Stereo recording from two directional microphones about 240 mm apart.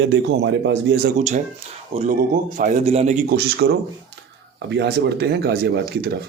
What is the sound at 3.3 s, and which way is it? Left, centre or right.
Speech, right.